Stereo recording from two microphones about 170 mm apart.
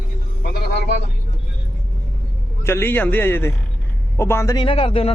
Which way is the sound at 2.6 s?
15° left (ahead or behind).